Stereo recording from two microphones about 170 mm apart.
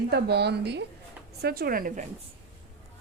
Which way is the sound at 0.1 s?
75° right (ahead or behind).